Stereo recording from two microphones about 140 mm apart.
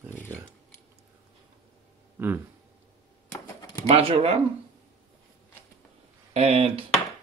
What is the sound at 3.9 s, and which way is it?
Speech, 45° right (ahead or behind).